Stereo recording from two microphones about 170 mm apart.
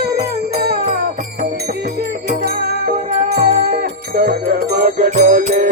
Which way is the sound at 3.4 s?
40° right (ahead or behind).